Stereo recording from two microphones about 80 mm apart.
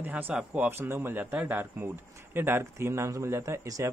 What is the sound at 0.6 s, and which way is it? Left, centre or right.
Speech, right.